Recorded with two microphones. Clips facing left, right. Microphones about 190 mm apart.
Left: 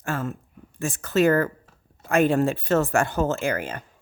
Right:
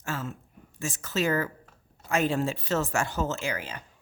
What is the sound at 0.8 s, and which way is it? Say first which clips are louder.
A woman's voice: left 8 dB; 55° left (ahead or behind).